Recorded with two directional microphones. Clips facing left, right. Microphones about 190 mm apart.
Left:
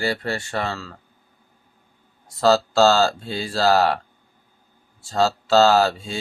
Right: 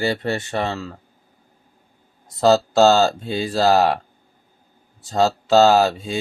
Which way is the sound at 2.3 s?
20° right (ahead or behind).